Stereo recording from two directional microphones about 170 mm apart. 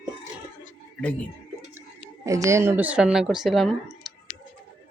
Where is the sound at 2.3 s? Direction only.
20° right (ahead or behind); by 4.1 s centre (ahead or behind).